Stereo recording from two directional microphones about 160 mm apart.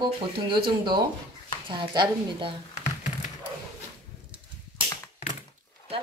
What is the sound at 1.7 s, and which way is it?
Speech, 30° right (ahead or behind).